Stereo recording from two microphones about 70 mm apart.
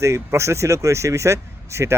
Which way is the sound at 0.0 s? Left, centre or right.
Right.